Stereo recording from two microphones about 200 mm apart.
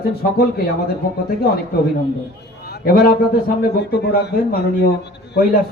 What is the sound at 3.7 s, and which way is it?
A man's voice, 55° left (ahead or behind).